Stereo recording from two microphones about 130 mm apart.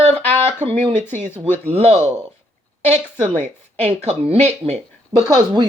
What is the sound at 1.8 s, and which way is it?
Speech, 55° right (ahead or behind).